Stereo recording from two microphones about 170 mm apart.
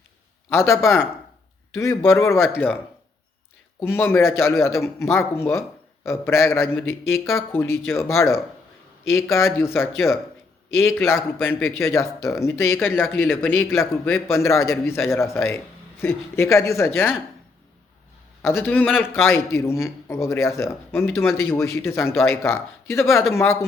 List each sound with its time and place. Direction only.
0.5 s speech: 15° left (ahead or behind)
3.8 s speech: 10° left (ahead or behind)
18.4 s speech: 15° left (ahead or behind)